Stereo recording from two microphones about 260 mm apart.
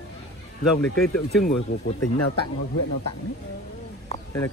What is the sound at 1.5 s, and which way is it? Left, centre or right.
Speech, left.